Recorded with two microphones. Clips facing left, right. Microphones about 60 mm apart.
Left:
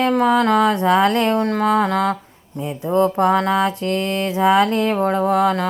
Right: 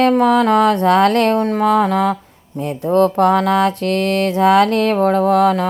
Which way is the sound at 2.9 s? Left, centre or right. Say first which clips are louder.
Right 3 dB; right.